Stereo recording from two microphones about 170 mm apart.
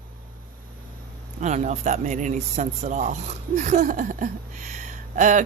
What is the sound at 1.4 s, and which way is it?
Speech, 45° right (ahead or behind).